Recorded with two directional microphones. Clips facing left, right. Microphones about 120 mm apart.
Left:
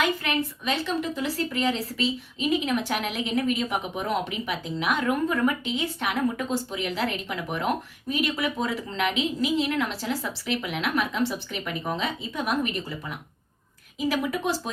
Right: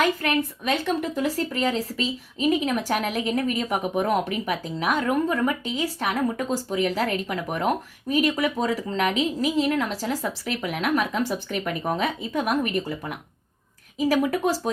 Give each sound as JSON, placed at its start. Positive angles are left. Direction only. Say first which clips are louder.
{"t": 0.0, "sound": "a woman's voice", "louder": "right 3 dB", "side_deg": -50}